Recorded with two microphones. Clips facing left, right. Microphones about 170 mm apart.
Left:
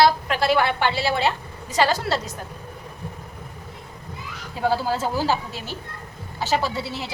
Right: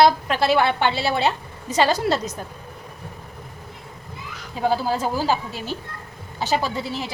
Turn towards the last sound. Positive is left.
turn(degrees=-15)  # may be behind; listen again after turning